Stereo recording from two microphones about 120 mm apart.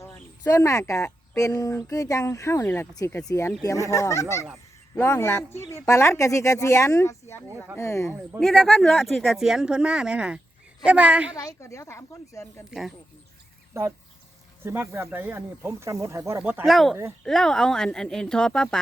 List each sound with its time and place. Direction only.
0.0 s cricket: 25° left (ahead or behind)
1.4 s speech: 30° left (ahead or behind)
8.4 s a woman's voice: centre (ahead or behind)
11.3 s speech: 25° left (ahead or behind)
14.6 s a woman's voice: 20° right (ahead or behind)
16.6 s speech: centre (ahead or behind)